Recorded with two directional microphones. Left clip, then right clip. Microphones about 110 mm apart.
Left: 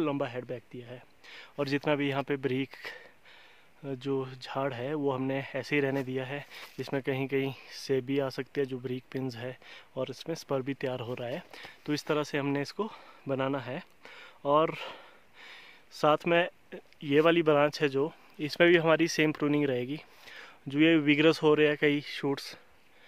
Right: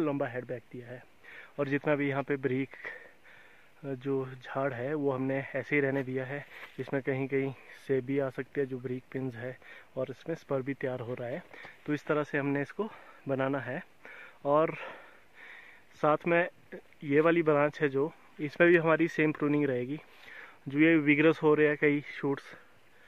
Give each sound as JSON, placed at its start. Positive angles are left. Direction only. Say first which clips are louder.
{"t": 0.0, "sound": "speech", "louder": "even", "side_deg": 20}
{"t": 10.5, "sound": "speech", "louder": "left 1 dB", "side_deg": 25}
{"t": 11.9, "sound": "speech", "louder": "even", "side_deg": 10}